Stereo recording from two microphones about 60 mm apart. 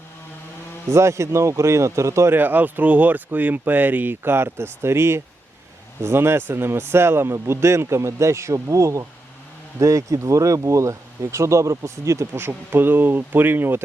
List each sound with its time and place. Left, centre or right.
0.9 s speech: right
2.3 s speech: right
12.4 s speech: right